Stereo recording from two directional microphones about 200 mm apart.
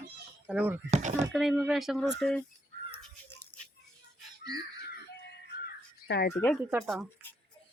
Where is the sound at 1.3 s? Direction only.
Centre (ahead or behind).